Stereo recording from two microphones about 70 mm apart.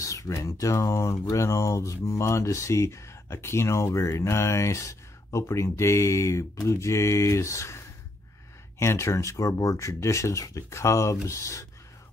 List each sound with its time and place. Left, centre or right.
0.0 s speech: left